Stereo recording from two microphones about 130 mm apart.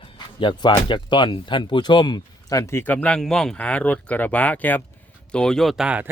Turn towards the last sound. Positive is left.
turn(degrees=-10)  # may be behind; listen again after turning